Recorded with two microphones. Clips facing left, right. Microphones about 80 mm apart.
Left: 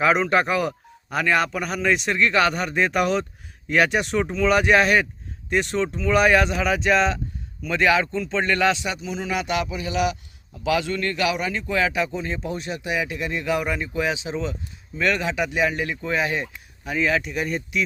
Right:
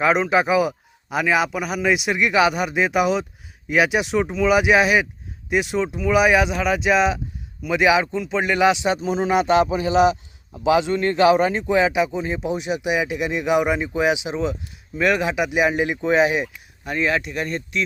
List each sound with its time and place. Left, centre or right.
0.0 s a man's voice: centre
8.8 s a man's voice: right
16.4 s speech: centre